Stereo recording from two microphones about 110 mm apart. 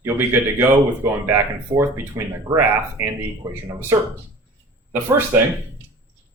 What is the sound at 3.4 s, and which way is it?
Speech, 35° right (ahead or behind).